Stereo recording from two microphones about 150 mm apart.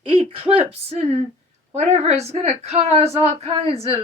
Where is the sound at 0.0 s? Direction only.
35° right (ahead or behind).